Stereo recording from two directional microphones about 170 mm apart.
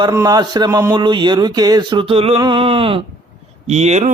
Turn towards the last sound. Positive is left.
turn(degrees=-45)  # may be behind; listen again after turning